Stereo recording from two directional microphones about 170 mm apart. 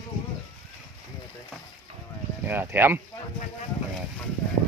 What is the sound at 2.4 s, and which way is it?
Speech, 10° right (ahead or behind).